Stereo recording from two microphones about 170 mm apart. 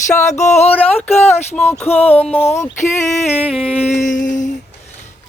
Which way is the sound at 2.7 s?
45° left (ahead or behind).